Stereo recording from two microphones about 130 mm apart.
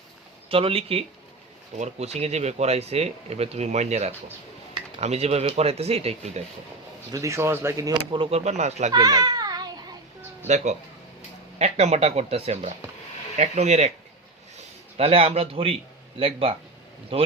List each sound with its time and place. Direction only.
0.4 s a man's voice: 45° right (ahead or behind)
7.1 s speech: 25° right (ahead or behind)
8.1 s speech: 45° right (ahead or behind); by 8.9 s 60° right (ahead or behind)
8.9 s a sound: 30° right (ahead or behind)
10.4 s speech: 65° right (ahead or behind)
14.9 s a man's voice: 50° right (ahead or behind)